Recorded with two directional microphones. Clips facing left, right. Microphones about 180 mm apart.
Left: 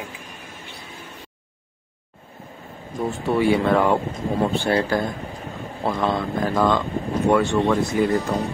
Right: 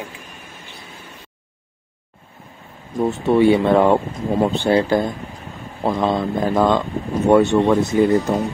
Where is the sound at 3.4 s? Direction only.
25° right (ahead or behind).